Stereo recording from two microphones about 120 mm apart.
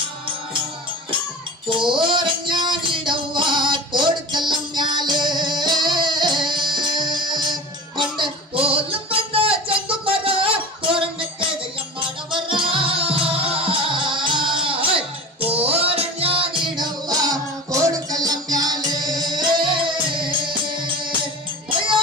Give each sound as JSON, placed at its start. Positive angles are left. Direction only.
{"t": 1.7, "sound": "music", "side_deg": -40}